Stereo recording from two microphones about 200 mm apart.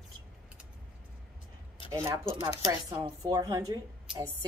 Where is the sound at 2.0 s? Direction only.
15° right (ahead or behind).